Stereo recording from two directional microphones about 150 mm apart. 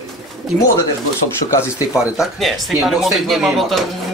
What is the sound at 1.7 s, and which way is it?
Speech, 5° right (ahead or behind).